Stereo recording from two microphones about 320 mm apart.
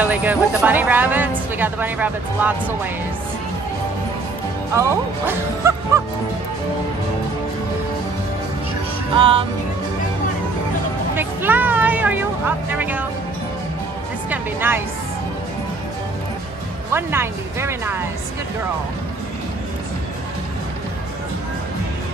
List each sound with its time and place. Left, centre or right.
0.0 s speech: centre
4.7 s speech: centre
9.1 s speech: centre
11.1 s speech: centre
14.3 s speech: centre
16.9 s speech: centre